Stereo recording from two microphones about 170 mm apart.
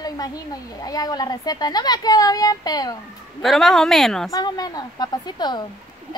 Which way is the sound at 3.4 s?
Centre (ahead or behind).